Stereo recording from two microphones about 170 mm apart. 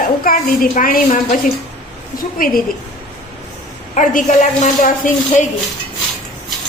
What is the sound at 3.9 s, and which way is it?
A woman's voice, 50° left (ahead or behind).